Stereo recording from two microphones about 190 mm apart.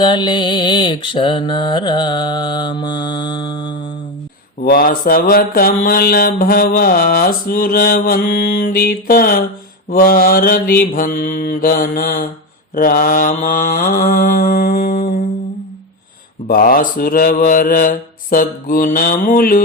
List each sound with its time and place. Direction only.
0.0 s mantra: 25° left (ahead or behind)
4.6 s mantra: 50° left (ahead or behind)
16.5 s mantra: 50° left (ahead or behind)